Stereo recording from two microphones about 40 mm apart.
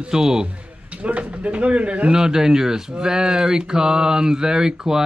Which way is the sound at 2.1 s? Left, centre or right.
Centre.